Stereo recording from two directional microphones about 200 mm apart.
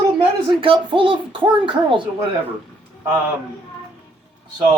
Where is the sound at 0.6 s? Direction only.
25° right (ahead or behind).